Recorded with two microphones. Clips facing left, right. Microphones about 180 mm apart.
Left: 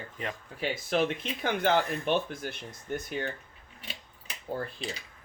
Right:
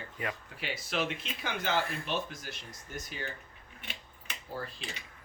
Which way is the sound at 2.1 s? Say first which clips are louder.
Left 7 dB; 55° left (ahead or behind).